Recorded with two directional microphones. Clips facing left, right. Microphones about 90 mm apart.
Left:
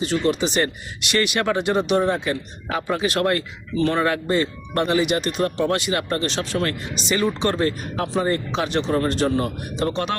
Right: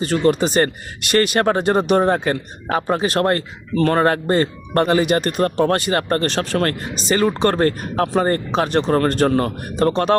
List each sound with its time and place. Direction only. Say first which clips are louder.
0.0 s speech: right 4 dB; 45° right (ahead or behind)